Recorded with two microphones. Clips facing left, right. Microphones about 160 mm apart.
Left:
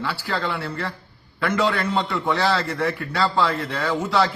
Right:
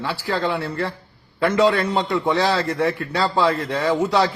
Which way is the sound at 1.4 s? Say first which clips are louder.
Right 5 dB; 20° right (ahead or behind).